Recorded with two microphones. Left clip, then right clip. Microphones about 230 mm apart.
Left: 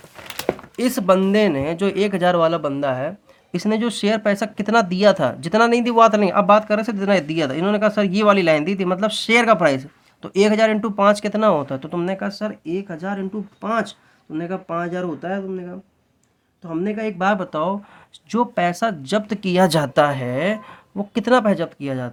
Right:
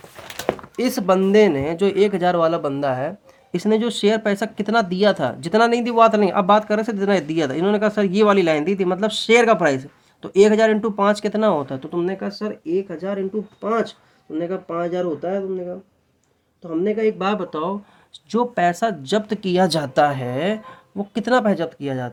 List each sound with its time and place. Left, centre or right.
0.8 s speech: centre
11.9 s speech: left
16.8 s speech: left
18.3 s speech: centre